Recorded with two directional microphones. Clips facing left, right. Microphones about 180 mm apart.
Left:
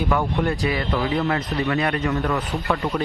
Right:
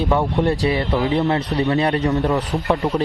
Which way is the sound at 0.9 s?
20° right (ahead or behind).